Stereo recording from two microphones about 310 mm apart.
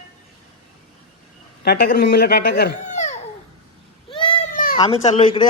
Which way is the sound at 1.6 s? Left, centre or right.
Left.